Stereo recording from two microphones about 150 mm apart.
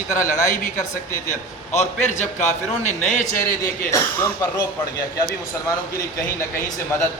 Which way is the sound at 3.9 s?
20° left (ahead or behind).